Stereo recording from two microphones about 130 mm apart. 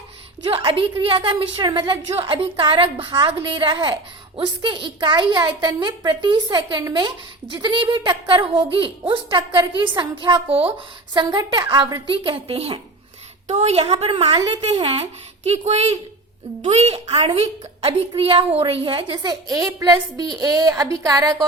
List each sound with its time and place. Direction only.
0.5 s a woman's voice: 45° right (ahead or behind)
13.5 s a woman's voice: 55° right (ahead or behind); by 21.4 s 30° right (ahead or behind)